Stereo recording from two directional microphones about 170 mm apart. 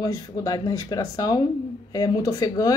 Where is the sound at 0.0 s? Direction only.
20° left (ahead or behind).